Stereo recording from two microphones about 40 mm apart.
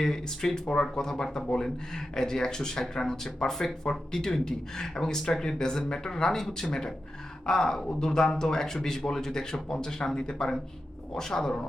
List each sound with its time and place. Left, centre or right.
0.0 s speech: centre